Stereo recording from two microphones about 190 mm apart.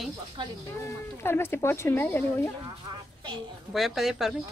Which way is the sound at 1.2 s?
10° left (ahead or behind).